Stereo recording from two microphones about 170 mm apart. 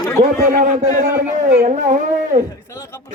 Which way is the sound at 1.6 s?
50° right (ahead or behind).